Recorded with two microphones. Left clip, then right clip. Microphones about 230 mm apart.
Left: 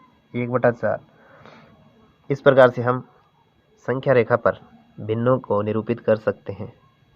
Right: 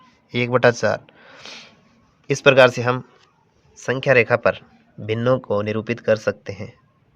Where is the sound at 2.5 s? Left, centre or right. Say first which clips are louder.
Right 1 dB; right.